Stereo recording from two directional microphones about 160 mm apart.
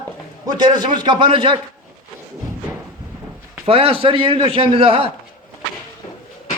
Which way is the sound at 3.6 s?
35° right (ahead or behind).